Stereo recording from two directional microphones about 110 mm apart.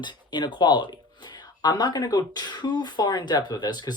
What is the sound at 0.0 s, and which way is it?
Speech, 45° left (ahead or behind).